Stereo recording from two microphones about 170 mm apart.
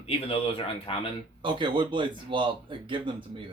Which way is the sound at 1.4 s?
30° right (ahead or behind).